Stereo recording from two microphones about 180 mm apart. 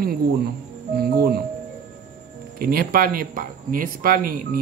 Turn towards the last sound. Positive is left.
turn(degrees=-50)  # may be behind; listen again after turning